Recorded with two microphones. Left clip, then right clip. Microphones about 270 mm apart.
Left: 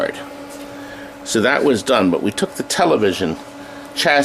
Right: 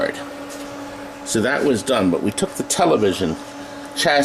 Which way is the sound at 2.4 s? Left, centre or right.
Left.